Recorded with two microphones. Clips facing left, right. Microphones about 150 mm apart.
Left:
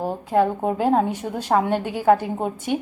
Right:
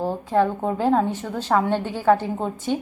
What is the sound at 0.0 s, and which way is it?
A woman's voice, 15° left (ahead or behind).